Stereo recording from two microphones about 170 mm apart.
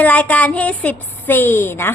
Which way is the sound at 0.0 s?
10° left (ahead or behind).